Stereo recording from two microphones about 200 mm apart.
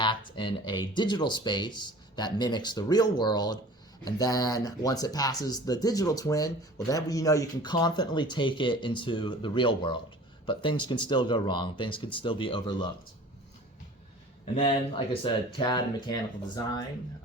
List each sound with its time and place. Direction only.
0.0 s speech: 25° left (ahead or behind)
14.5 s speech: 25° left (ahead or behind)